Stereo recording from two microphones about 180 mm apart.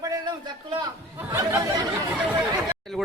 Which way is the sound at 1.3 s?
15° right (ahead or behind).